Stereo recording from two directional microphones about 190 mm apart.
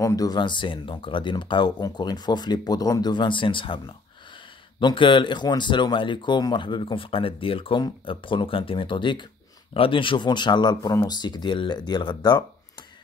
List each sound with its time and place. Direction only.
0.0 s speech: 15° left (ahead or behind)